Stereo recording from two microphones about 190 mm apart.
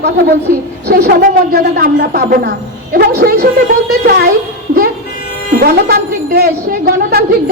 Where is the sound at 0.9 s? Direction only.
55° right (ahead or behind).